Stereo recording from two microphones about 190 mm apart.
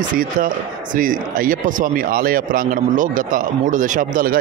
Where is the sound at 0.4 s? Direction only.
45° right (ahead or behind).